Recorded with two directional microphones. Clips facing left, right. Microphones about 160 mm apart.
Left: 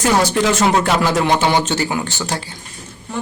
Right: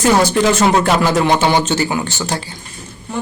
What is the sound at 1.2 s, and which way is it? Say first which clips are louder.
Speech: right 2 dB; 30° right (ahead or behind).